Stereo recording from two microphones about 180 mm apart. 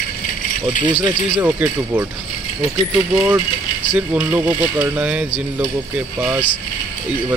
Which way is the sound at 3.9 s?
5° right (ahead or behind).